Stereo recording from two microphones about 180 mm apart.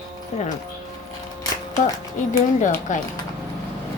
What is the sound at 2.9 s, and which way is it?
Speech, 45° left (ahead or behind).